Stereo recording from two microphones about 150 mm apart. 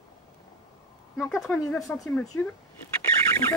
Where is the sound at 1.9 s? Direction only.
10° left (ahead or behind).